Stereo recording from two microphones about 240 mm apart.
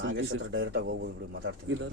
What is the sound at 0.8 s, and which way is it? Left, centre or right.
Speech, right.